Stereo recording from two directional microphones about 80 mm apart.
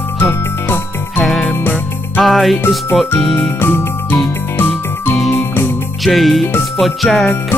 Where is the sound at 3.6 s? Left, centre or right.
Left.